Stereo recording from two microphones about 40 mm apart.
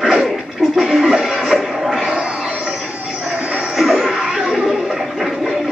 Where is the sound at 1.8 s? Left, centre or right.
Centre.